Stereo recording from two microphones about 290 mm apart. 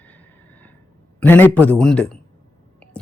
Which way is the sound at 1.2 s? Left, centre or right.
Centre.